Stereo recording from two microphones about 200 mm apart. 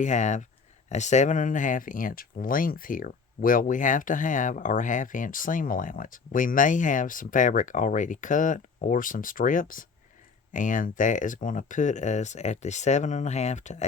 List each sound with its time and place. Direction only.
0.0 s speech: 35° left (ahead or behind)